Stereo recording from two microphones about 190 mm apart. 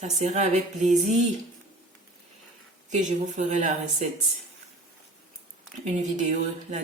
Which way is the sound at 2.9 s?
40° right (ahead or behind).